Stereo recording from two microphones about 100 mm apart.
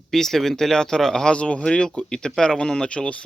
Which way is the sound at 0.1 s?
5° left (ahead or behind).